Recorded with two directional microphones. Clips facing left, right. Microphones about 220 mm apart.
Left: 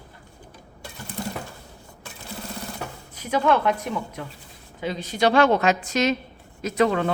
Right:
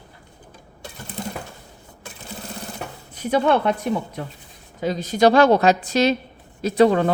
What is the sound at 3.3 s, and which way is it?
Speech, 35° right (ahead or behind).